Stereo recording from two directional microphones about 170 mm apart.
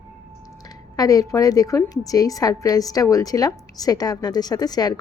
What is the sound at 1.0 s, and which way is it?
A woman's voice, 20° left (ahead or behind).